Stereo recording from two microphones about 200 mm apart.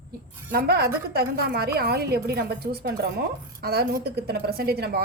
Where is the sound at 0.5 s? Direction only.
50° right (ahead or behind).